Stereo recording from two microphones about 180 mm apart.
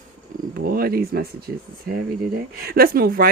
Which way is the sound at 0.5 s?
55° right (ahead or behind).